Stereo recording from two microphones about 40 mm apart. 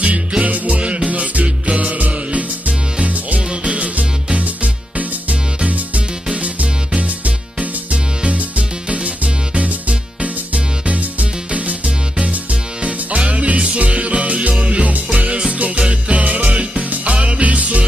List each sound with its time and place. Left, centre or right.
0.4 s music: right
6.3 s music: right
7.9 s music: right
15.1 s music: right